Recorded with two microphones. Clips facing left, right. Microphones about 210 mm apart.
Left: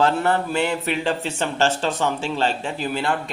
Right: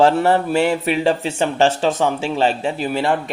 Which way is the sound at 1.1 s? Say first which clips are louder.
Right 5 dB; 10° right (ahead or behind).